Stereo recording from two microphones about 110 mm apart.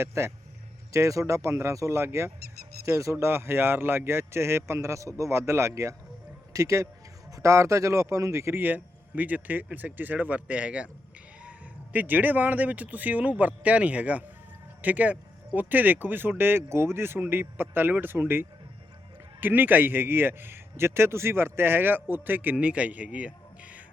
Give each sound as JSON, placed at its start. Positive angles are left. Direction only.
{"t": 0.0, "sound": "a man's voice", "side_deg": -25}
{"t": 11.9, "sound": "a man's voice", "side_deg": -15}